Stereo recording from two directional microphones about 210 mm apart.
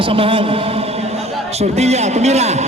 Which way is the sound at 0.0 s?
25° right (ahead or behind).